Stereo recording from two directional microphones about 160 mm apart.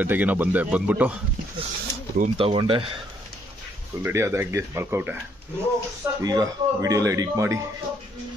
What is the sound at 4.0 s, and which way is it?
Speech, 15° right (ahead or behind).